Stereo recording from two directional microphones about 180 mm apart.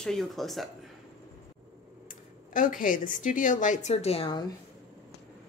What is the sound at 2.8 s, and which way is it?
A woman's voice, 45° left (ahead or behind).